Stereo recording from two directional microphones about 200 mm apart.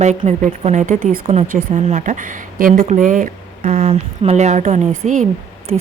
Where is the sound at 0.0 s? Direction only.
35° right (ahead or behind).